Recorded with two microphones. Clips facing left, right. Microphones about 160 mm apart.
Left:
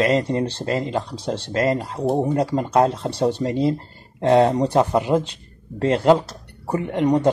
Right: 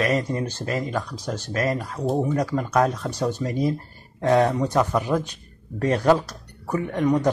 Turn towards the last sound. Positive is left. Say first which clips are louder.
# left 2 dB
turn(degrees=25)  # may be behind; listen again after turning